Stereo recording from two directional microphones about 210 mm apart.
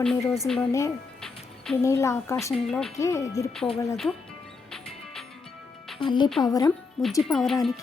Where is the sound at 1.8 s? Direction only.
15° left (ahead or behind).